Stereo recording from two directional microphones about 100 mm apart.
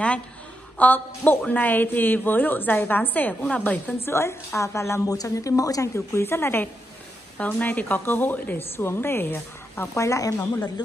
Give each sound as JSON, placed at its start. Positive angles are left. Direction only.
{"t": 0.7, "sound": "a woman's voice", "side_deg": 15}